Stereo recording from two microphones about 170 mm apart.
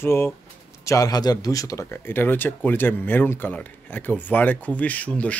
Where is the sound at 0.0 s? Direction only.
15° left (ahead or behind).